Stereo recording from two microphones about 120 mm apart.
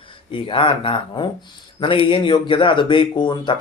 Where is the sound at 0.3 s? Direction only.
45° left (ahead or behind).